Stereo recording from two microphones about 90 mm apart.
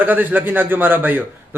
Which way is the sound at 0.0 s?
20° right (ahead or behind).